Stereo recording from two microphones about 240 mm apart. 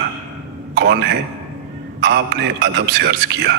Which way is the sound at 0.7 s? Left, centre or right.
Right.